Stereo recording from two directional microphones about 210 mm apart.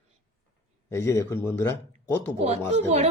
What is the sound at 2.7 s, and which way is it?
Speech, 30° right (ahead or behind).